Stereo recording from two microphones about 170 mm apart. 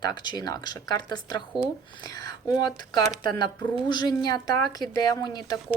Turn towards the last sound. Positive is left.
turn(degrees=25)  # may be behind; listen again after turning